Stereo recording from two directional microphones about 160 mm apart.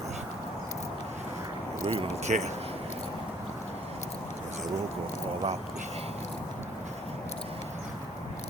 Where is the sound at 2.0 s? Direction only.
45° right (ahead or behind).